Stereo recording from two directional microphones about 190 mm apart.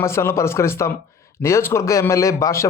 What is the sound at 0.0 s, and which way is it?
A man's voice, 15° left (ahead or behind).